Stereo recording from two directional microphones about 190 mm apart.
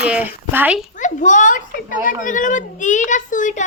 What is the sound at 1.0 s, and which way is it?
Speech, 40° left (ahead or behind).